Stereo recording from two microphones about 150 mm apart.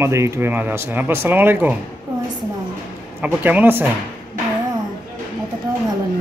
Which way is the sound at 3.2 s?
10° right (ahead or behind).